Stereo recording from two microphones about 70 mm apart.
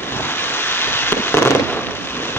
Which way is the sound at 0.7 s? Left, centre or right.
Left.